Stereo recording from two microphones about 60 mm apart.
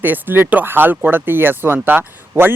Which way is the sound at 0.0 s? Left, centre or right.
Right.